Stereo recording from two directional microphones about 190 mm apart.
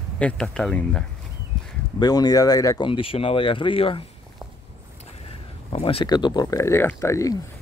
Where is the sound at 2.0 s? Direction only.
20° left (ahead or behind).